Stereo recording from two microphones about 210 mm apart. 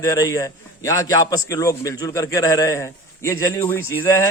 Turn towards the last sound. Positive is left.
turn(degrees=10)  # may be behind; listen again after turning